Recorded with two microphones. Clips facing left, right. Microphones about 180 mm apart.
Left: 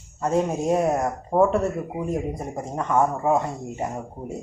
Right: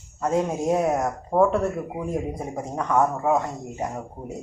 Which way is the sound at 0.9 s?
5° left (ahead or behind).